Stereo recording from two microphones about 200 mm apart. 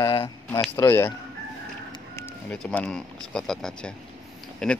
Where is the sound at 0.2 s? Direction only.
10° left (ahead or behind).